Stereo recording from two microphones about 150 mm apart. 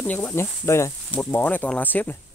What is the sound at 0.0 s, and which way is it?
Speech, 10° left (ahead or behind).